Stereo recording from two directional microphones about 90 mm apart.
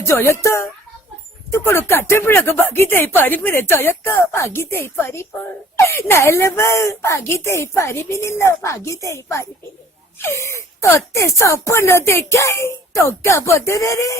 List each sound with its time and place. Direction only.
0.0 s speech: 30° left (ahead or behind)